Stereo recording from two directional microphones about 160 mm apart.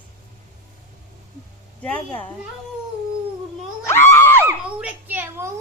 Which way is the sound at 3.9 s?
15° left (ahead or behind).